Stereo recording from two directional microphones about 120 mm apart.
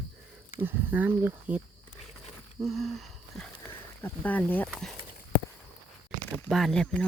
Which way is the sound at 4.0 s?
15° left (ahead or behind).